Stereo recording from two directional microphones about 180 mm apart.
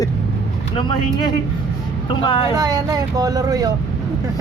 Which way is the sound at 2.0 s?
30° left (ahead or behind).